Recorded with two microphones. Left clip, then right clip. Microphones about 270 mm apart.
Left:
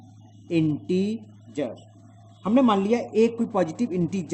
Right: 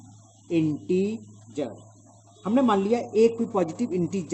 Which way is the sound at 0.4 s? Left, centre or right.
Centre.